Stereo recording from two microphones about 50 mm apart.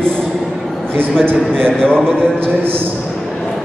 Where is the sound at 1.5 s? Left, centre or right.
Centre.